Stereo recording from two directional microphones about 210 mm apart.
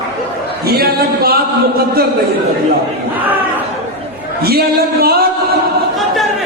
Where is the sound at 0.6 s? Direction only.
45° right (ahead or behind).